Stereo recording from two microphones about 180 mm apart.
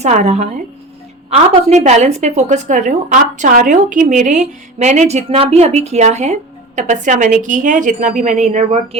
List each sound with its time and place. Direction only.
0.0 s a woman's voice: 40° right (ahead or behind)
1.5 s a woman's voice: 40° right (ahead or behind)